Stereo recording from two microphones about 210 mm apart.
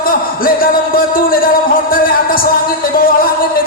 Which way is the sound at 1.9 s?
40° left (ahead or behind).